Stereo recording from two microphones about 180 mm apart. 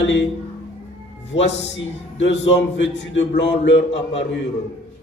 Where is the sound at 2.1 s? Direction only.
80° left.